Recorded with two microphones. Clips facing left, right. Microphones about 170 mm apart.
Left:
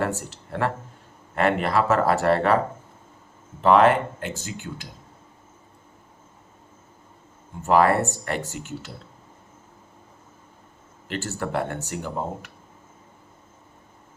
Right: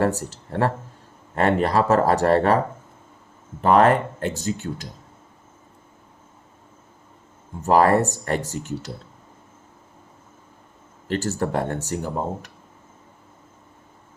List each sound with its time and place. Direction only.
0.0 s speech: 35° right (ahead or behind)
3.6 s speech: 45° right (ahead or behind)
7.6 s speech: 35° right (ahead or behind)
11.1 s speech: 40° right (ahead or behind)